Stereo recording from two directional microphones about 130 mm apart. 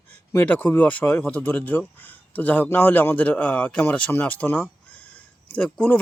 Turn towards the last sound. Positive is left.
turn(degrees=10)  # may be behind; listen again after turning